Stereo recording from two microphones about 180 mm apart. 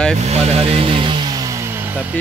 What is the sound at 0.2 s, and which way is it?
Chainsaw, 35° right (ahead or behind).